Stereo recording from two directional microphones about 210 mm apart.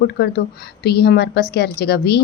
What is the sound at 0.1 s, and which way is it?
Speech, 50° left (ahead or behind).